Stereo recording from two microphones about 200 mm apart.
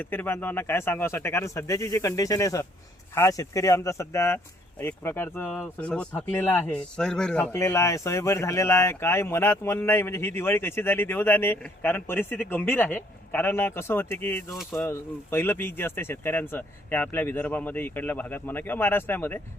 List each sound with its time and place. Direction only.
0.0 s speech: 10° left (ahead or behind)